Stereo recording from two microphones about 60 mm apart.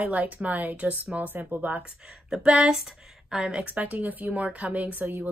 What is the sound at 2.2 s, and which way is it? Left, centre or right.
A woman's voice, centre.